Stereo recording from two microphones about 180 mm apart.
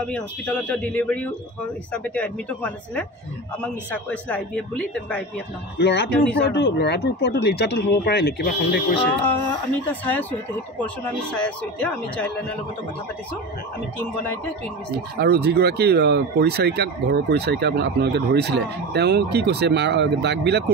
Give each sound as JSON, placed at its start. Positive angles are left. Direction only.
{"t": 0.0, "sound": "speech", "side_deg": 5}
{"t": 5.8, "sound": "speech", "side_deg": 65}
{"t": 9.8, "sound": "speech", "side_deg": 10}
{"t": 11.3, "sound": "speech", "side_deg": 5}
{"t": 14.9, "sound": "speech", "side_deg": -65}